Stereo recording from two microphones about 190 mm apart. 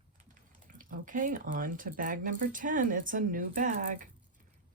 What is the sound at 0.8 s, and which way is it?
Speech, 45° right (ahead or behind).